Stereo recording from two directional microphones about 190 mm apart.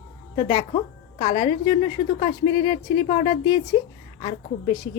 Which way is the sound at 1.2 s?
50° left (ahead or behind).